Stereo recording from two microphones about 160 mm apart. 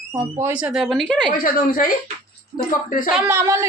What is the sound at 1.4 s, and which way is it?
Speech, 60° left (ahead or behind).